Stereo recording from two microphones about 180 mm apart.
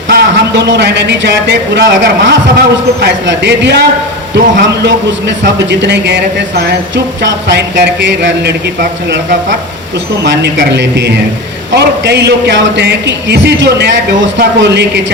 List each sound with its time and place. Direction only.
0.1 s a man's voice: 70° right (ahead or behind)